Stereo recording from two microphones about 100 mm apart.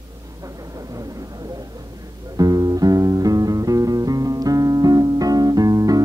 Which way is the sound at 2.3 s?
40° right (ahead or behind).